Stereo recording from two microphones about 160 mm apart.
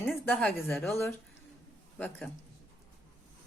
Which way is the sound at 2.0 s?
10° left (ahead or behind).